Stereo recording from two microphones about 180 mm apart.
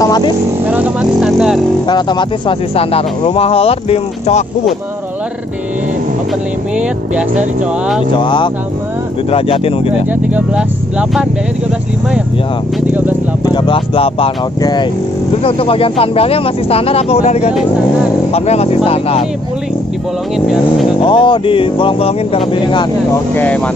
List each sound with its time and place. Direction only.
0.7 s speech: 10° right (ahead or behind)
1.9 s speech: 25° left (ahead or behind)
8.2 s speech: 25° left (ahead or behind)
10.3 s speech: 5° right (ahead or behind)
13.6 s speech: 30° left (ahead or behind)
21.0 s speech: 25° left (ahead or behind)
23.3 s speech: 10° left (ahead or behind)